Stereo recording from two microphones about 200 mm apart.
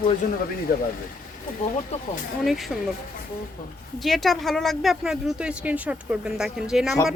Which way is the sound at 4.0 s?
Centre (ahead or behind).